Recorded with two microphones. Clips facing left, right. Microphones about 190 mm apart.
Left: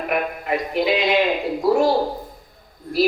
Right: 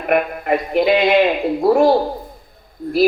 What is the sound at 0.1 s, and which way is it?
A man's voice, 55° right (ahead or behind).